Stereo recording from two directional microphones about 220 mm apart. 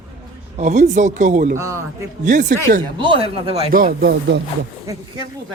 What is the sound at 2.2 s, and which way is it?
Speech, 35° right (ahead or behind).